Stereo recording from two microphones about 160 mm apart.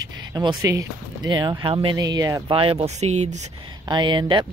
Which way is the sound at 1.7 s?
35° right (ahead or behind).